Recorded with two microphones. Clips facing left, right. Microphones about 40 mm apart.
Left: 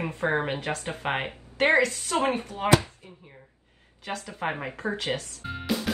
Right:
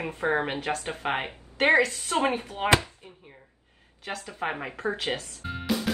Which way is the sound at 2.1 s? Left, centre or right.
Right.